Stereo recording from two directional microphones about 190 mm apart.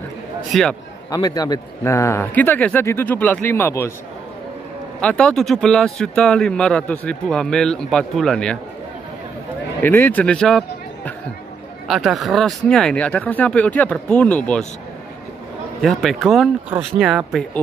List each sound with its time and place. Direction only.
0.5 s speech: centre (ahead or behind)
1.1 s speech: 20° left (ahead or behind)
5.0 s speech: 5° left (ahead or behind)
9.8 s speech: 10° left (ahead or behind)
11.9 s speech: centre (ahead or behind)
15.8 s speech: centre (ahead or behind)